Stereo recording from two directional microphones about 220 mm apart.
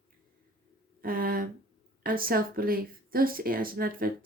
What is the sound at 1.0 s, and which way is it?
Speech, 40° right (ahead or behind).